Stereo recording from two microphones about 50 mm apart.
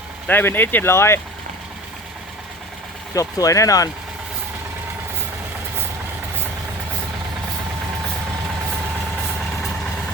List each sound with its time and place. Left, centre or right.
0.3 s speech: left
0.9 s speech: left
3.2 s speech: left